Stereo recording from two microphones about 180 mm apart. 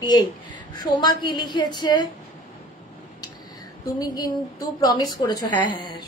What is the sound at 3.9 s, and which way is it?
A woman's voice, 20° left (ahead or behind).